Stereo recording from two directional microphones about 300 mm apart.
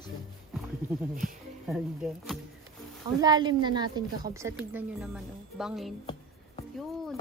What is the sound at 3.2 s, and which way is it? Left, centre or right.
Music, centre.